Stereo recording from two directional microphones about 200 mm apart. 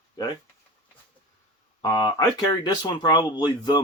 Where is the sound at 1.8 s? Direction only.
20° left (ahead or behind).